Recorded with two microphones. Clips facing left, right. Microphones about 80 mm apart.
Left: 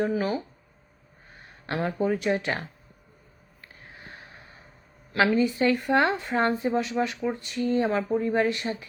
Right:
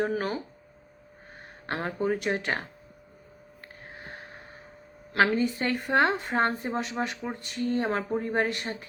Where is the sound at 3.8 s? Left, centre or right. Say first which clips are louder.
Right 3 dB; right.